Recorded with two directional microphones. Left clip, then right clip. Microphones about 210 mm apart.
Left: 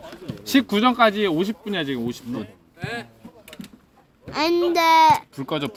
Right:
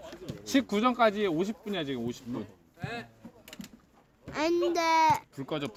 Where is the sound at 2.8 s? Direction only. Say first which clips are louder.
Left 8 dB; 25° left (ahead or behind).